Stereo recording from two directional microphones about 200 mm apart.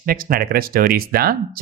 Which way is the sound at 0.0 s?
45° right (ahead or behind).